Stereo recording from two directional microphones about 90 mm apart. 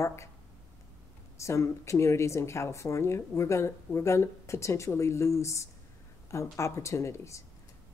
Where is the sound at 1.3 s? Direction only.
35° left (ahead or behind).